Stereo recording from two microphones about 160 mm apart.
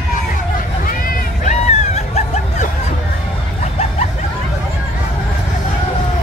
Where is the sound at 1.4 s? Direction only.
45° left (ahead or behind).